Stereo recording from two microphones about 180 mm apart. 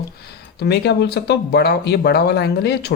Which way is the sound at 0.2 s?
65° left (ahead or behind).